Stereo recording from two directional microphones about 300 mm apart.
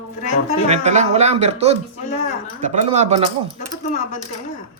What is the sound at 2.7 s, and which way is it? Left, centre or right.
Speech, right.